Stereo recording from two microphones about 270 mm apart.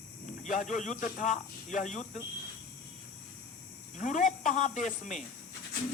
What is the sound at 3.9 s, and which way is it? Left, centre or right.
Speech, left.